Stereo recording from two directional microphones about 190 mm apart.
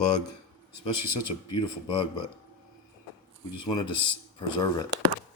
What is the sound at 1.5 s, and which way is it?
Speech, 25° left (ahead or behind).